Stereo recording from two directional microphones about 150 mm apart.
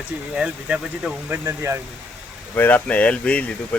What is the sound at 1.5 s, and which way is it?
Speech, 20° right (ahead or behind).